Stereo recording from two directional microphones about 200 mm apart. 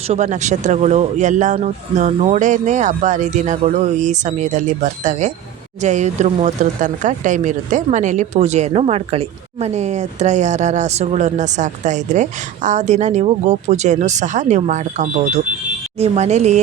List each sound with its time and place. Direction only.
0.1 s speech: 35° right (ahead or behind)